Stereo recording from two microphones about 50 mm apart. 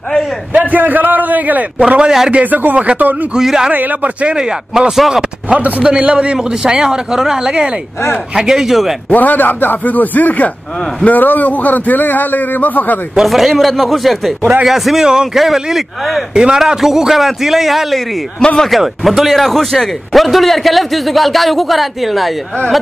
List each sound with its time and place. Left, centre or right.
0.7 s a man's voice: right
1.9 s a man's voice: centre
2.4 s a man's voice: right
3.3 s a man's voice: centre
3.7 s a man's voice: right
4.4 s a man's voice: centre
4.9 s speech: centre
5.5 s a man's voice: right
8.4 s a man's voice: centre
9.1 s a man's voice: left
13.2 s a man's voice: centre